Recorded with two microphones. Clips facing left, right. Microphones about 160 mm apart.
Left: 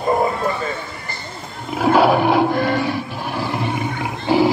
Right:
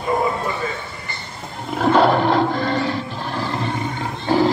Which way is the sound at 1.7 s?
5° left (ahead or behind).